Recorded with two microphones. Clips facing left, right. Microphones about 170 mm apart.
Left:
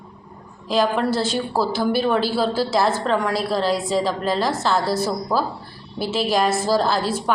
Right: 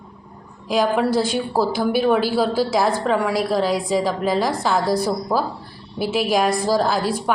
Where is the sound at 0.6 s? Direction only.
10° right (ahead or behind).